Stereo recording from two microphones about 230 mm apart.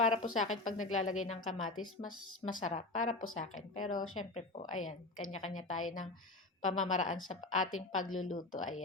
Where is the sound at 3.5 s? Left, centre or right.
Left.